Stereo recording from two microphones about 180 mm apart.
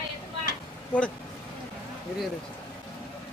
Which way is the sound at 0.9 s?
10° left (ahead or behind).